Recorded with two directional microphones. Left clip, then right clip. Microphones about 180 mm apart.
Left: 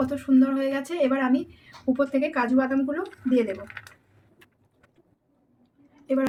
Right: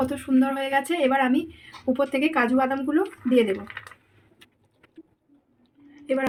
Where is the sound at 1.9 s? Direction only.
50° right (ahead or behind).